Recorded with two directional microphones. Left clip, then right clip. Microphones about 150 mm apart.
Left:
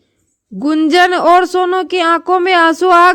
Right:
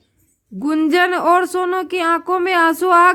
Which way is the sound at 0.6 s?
40° left (ahead or behind).